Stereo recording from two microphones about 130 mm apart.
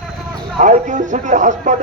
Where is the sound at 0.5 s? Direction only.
70° right (ahead or behind).